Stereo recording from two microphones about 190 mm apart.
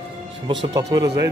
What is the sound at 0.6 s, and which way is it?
Speech, 20° right (ahead or behind).